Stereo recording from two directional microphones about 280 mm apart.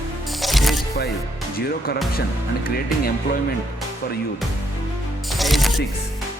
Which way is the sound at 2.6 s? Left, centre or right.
Left.